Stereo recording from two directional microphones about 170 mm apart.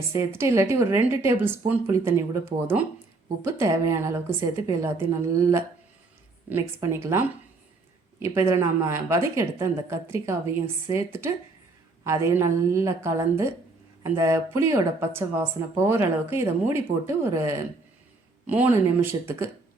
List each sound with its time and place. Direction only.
0.3 s speech: 15° right (ahead or behind)
8.2 s speech: 15° right (ahead or behind)